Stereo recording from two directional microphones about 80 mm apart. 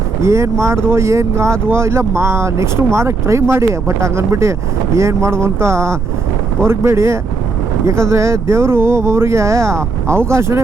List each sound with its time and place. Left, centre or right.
0.2 s speech: right